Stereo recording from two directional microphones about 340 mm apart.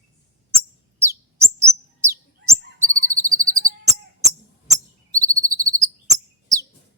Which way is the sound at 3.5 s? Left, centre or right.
Centre.